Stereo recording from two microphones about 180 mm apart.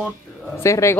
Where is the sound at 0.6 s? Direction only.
15° left (ahead or behind).